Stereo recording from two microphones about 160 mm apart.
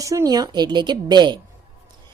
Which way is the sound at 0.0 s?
20° right (ahead or behind).